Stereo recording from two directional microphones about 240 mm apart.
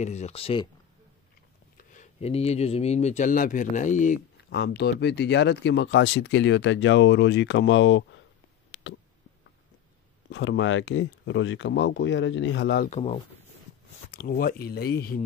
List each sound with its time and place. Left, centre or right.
0.0 s speech: left
1.8 s speech: left
4.5 s speech: left
10.3 s speech: left